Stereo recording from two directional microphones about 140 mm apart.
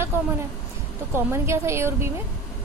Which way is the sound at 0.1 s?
15° right (ahead or behind).